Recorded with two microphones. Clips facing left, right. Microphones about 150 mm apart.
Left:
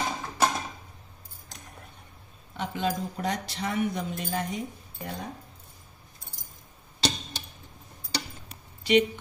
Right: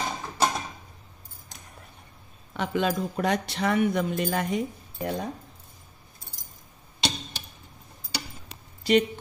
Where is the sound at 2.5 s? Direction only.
70° right (ahead or behind).